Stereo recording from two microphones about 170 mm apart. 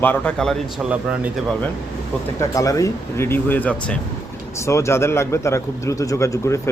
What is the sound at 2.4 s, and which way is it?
Speech, 20° left (ahead or behind).